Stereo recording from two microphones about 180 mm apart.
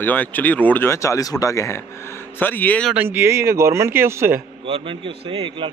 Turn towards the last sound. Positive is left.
turn(degrees=-30)  # may be behind; listen again after turning